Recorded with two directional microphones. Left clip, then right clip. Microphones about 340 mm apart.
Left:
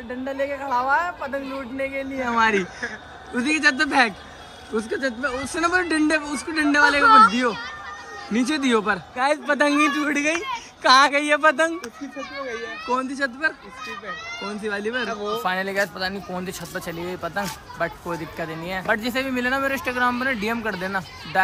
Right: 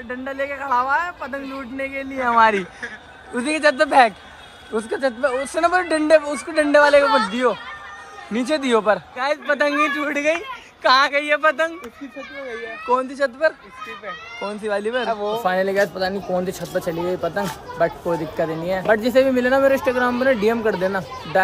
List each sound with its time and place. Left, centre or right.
1.9 s speech: centre
7.1 s speech: left
8.3 s speech: centre
12.9 s speech: centre
14.6 s speech: centre